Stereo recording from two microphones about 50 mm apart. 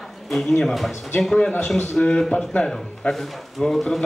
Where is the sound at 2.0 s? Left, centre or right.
Centre.